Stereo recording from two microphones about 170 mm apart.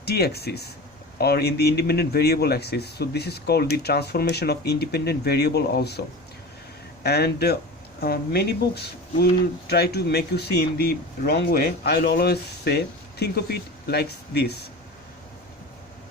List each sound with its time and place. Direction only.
0.0 s speech: 70° left (ahead or behind)